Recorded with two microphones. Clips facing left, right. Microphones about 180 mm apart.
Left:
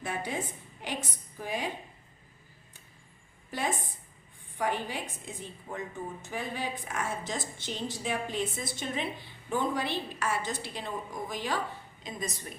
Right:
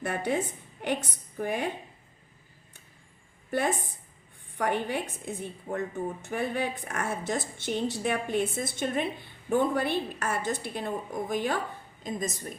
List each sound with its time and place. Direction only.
0.0 s a woman's voice: 60° right (ahead or behind)
4.5 s a woman's voice: 60° right (ahead or behind)